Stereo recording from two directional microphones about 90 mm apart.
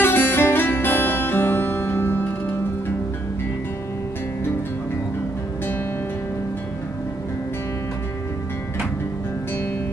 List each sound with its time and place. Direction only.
0.0 s music: 20° left (ahead or behind)